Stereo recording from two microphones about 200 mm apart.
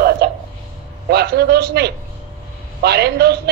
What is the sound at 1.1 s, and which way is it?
A woman's voice, 55° right (ahead or behind).